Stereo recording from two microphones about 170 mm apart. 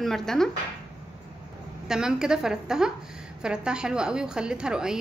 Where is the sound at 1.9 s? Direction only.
5° right (ahead or behind).